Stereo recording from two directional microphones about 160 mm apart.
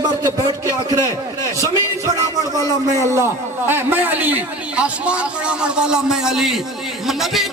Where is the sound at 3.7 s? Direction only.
15° right (ahead or behind).